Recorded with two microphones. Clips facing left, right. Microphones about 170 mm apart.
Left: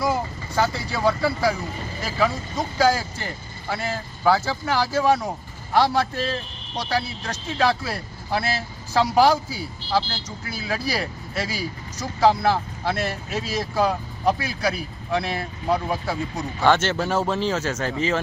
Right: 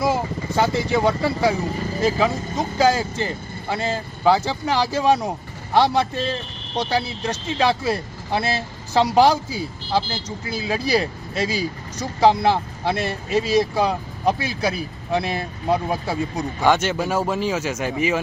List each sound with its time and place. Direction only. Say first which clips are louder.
0.0 s vehicle: right 3 dB; 25° right (ahead or behind)
0.9 s speech: right 3 dB; 20° right (ahead or behind)
16.6 s speech: even; 10° right (ahead or behind)